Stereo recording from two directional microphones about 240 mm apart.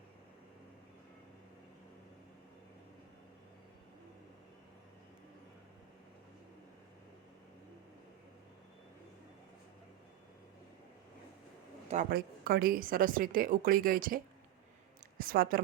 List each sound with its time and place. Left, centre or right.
11.9 s a woman's voice: right
15.2 s a woman's voice: right